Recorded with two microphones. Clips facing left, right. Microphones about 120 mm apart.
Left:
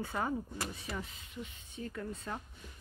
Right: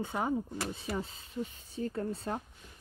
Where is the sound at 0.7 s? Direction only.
30° right (ahead or behind).